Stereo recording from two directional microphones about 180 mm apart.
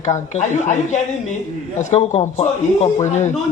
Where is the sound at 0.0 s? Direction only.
40° left (ahead or behind).